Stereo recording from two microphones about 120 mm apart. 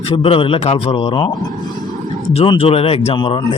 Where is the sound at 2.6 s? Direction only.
55° left (ahead or behind).